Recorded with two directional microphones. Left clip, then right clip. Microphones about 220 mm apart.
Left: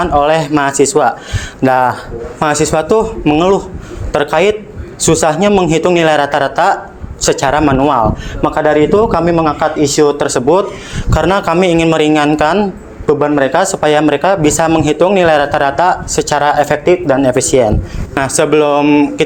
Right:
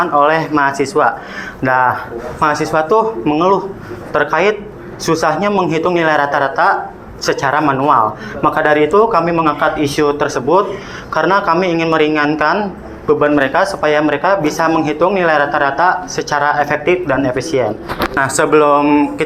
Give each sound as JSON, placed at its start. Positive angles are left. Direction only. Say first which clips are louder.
{"t": 0.0, "sound": "speech", "louder": "left 1 dB", "side_deg": 50}
{"t": 13.1, "sound": "speech", "louder": "left 1 dB", "side_deg": 35}
{"t": 18.1, "sound": "speech", "louder": "left 2 dB", "side_deg": 35}